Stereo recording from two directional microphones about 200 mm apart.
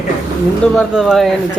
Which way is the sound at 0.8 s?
Centre (ahead or behind).